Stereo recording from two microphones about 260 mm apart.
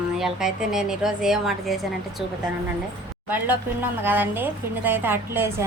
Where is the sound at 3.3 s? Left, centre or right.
Centre.